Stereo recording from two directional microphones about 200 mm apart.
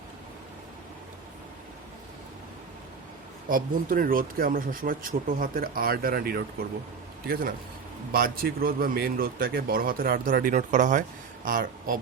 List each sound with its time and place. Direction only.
3.5 s speech: 45° right (ahead or behind)